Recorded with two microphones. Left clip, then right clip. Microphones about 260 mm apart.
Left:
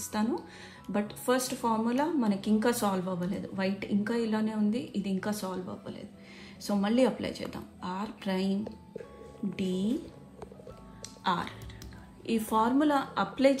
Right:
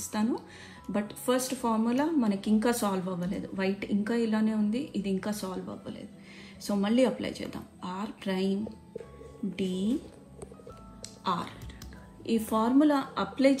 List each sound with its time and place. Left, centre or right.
0.1 s a woman's voice: left
9.6 s a woman's voice: left
11.2 s a woman's voice: left